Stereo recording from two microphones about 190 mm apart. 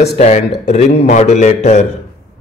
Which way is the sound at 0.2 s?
35° left (ahead or behind).